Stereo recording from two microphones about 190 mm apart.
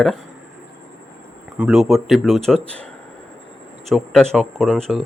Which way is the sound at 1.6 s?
Centre (ahead or behind).